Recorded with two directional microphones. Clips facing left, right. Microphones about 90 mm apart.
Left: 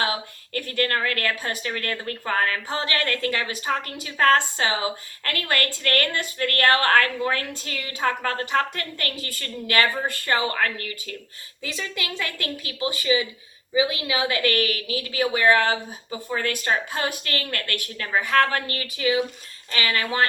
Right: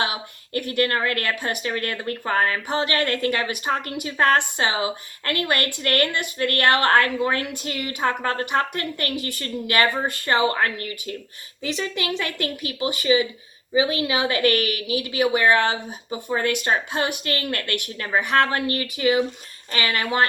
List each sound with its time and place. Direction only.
0.0 s speech: 20° right (ahead or behind)